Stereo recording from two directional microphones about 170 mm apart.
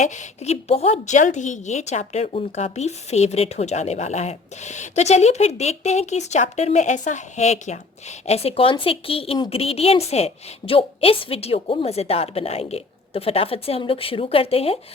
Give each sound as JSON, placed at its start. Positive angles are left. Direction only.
{"t": 0.0, "sound": "a woman's voice", "side_deg": 45}